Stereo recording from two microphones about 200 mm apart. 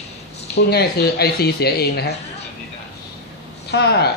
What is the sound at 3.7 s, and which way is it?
Speech, 55° left (ahead or behind).